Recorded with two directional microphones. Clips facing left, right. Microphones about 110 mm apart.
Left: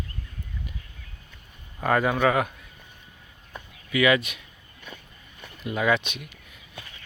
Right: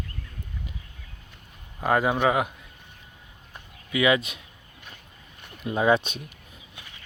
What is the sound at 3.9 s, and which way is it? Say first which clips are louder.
Speech: left 1 dB; 20° right (ahead or behind).